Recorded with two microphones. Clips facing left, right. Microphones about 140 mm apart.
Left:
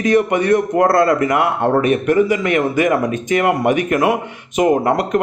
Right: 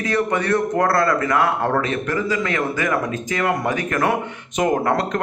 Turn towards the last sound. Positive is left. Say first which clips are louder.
# left 4 dB
turn(degrees=15)  # may be behind; listen again after turning